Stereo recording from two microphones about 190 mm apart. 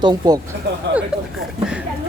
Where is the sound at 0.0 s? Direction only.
20° right (ahead or behind).